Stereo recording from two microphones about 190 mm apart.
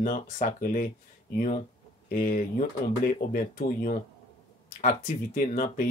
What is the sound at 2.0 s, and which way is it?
Speech, 45° left (ahead or behind).